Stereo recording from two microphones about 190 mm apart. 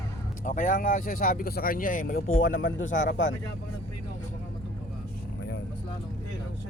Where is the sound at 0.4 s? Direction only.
45° left (ahead or behind).